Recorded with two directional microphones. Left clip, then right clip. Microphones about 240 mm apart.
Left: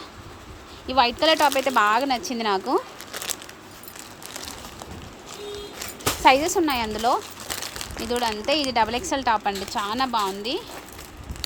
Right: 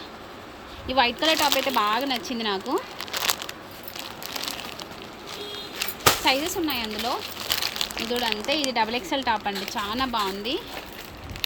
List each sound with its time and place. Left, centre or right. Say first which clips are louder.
0.9 s a woman's voice: left 2 dB; centre
6.2 s speech: left 6 dB; centre
7.0 s crumpling: left 5 dB; centre
8.1 s a woman's voice: left 4 dB; centre